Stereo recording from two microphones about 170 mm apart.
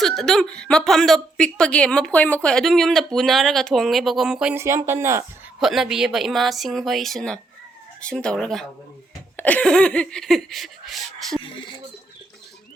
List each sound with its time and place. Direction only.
0.0 s a woman's voice: centre (ahead or behind)
4.5 s speech: 15° right (ahead or behind)
5.5 s a woman's voice: centre (ahead or behind)